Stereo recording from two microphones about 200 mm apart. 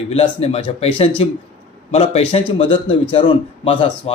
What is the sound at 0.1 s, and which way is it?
Speech, 30° left (ahead or behind).